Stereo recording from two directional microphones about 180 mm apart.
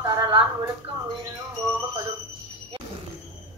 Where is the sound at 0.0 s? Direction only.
20° right (ahead or behind).